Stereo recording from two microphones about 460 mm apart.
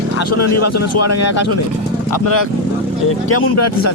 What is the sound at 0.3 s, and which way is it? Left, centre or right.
A man's voice, left.